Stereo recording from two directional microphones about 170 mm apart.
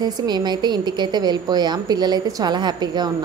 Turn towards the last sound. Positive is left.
turn(degrees=-25)  # may be behind; listen again after turning